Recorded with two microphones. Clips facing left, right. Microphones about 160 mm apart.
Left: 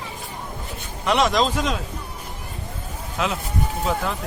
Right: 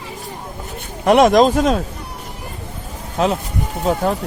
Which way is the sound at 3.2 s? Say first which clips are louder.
Right 6 dB; 35° right (ahead or behind).